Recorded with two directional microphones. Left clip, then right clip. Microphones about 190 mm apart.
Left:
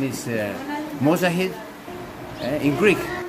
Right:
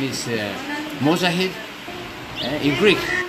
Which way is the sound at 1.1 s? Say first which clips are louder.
Right 1 dB; 10° left (ahead or behind).